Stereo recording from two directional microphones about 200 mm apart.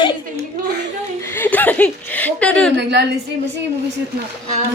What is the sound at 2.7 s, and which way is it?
Speech, 60° right (ahead or behind).